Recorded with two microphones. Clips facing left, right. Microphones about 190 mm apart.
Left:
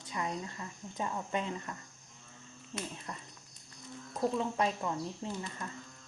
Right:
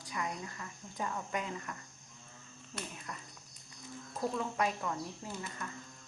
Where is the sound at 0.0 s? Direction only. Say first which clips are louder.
Left 2 dB; 25° left (ahead or behind).